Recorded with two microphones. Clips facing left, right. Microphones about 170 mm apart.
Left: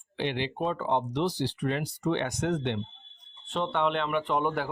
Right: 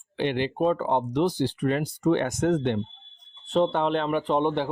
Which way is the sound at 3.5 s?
35° right (ahead or behind).